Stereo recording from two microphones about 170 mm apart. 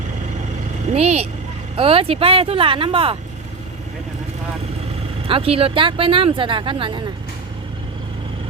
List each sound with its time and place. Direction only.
0.9 s speech: 40° right (ahead or behind)
5.3 s speech: 35° right (ahead or behind)